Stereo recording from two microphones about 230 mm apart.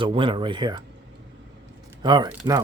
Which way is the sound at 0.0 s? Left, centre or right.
Right.